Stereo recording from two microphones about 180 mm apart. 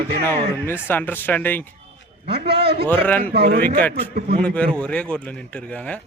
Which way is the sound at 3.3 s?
65° right (ahead or behind).